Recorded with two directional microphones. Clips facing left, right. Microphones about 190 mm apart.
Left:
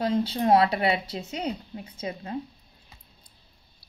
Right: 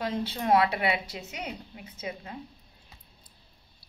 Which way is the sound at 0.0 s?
35° left (ahead or behind).